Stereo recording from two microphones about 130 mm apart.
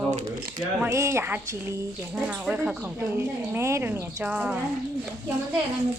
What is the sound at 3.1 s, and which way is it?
Speech, 20° right (ahead or behind).